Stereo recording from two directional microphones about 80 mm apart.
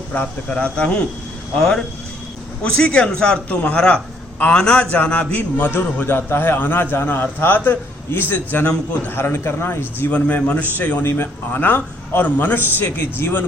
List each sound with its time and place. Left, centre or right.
0.1 s a man's voice: centre
10.1 s a man's voice: centre